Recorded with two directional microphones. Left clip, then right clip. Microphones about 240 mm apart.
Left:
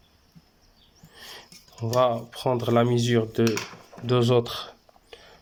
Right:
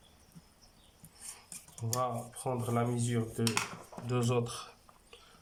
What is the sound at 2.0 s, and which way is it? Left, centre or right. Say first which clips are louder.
Speech: left 13 dB; left.